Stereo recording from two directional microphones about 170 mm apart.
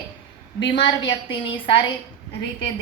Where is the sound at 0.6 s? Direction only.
30° left (ahead or behind).